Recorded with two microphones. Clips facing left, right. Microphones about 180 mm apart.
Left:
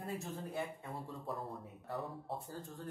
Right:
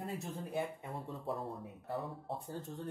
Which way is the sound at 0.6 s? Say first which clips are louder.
Right 5 dB; 25° right (ahead or behind).